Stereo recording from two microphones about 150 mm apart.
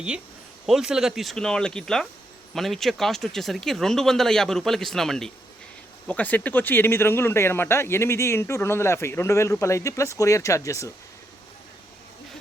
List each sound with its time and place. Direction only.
0.6 s speech: 5° right (ahead or behind); by 10.9 s 20° left (ahead or behind)